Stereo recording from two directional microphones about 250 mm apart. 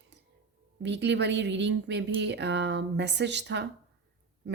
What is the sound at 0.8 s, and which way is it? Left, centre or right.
Speech, right.